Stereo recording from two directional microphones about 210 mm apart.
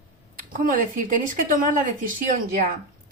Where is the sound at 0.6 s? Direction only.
40° right (ahead or behind).